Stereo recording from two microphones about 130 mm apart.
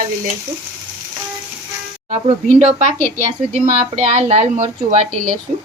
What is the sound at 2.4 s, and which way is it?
Speech, 65° right (ahead or behind).